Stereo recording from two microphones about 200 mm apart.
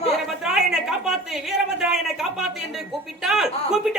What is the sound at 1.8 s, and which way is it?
Speech, centre (ahead or behind).